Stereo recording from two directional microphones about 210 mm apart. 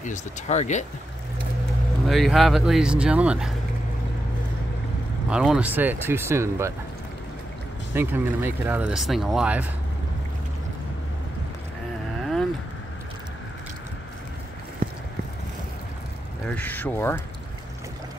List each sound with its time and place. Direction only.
0.0 s speech: 35° left (ahead or behind)
2.0 s speech: centre (ahead or behind)
5.3 s speech: 5° right (ahead or behind)
7.9 s speech: 10° right (ahead or behind)
16.4 s speech: 5° left (ahead or behind)